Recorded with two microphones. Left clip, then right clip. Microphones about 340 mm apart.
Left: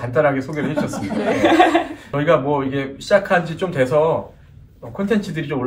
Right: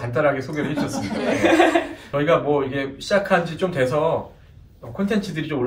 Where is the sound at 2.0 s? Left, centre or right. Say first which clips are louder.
Left 1 dB; centre.